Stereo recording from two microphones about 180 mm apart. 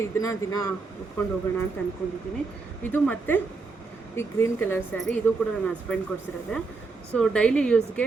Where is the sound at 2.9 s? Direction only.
10° left (ahead or behind).